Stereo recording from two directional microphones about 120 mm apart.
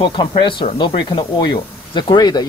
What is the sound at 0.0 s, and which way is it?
Speech, 40° left (ahead or behind).